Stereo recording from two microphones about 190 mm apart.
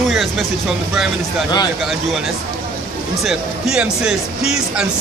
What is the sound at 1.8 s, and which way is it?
Speech, centre (ahead or behind).